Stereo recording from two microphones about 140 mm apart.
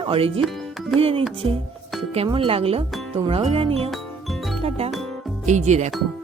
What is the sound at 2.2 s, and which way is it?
Speech, 40° right (ahead or behind).